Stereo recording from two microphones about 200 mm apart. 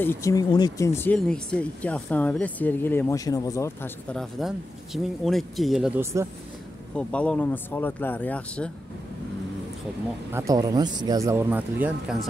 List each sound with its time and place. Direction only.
0.0 s speech: 15° left (ahead or behind)
7.0 s speech: 5° left (ahead or behind)
10.3 s speech: 15° right (ahead or behind)